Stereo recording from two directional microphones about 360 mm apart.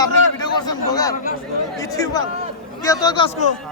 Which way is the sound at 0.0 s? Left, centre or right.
Centre.